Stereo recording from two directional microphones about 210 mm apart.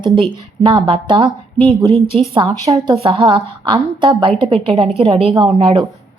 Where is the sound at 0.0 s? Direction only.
25° right (ahead or behind).